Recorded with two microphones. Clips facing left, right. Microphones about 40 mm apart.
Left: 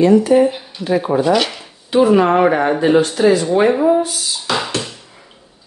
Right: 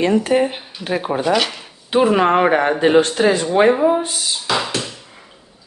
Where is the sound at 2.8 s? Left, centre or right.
Right.